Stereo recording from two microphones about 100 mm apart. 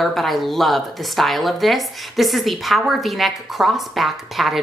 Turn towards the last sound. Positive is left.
turn(degrees=0)  # may be behind; listen again after turning